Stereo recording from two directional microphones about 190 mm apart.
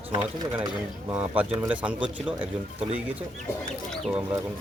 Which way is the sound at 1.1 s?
5° right (ahead or behind).